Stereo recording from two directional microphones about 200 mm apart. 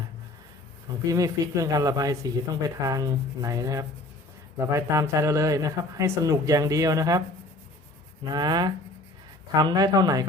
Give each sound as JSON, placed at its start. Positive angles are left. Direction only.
{"t": 1.0, "sound": "speech", "side_deg": -15}
{"t": 8.2, "sound": "speech", "side_deg": -20}